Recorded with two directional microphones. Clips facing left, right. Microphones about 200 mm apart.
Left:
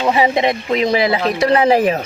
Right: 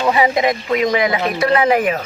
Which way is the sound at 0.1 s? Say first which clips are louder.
Left 1 dB; 25° left (ahead or behind).